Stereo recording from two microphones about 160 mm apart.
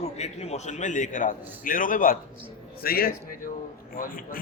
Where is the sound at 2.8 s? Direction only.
70° left (ahead or behind).